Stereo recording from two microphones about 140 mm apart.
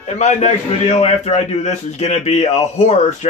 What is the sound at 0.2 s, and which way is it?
A man's voice, 55° left (ahead or behind).